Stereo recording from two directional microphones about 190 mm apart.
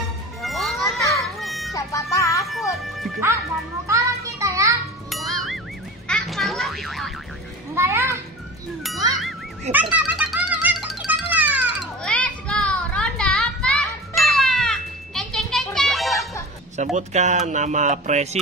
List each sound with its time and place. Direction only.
0.4 s music: centre (ahead or behind)
1.7 s music: 15° left (ahead or behind)
2.5 s music: centre (ahead or behind)
3.8 s children playing: 15° right (ahead or behind)
5.1 s music: centre (ahead or behind)
6.0 s children playing: centre (ahead or behind)
7.7 s a child's voice: 15° right (ahead or behind)
9.1 s music: 5° right (ahead or behind)
12.0 s children playing: 5° left (ahead or behind)
16.7 s speech: 35° right (ahead or behind)